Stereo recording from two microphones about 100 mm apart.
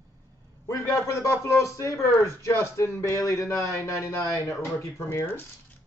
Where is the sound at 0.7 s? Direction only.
30° left (ahead or behind).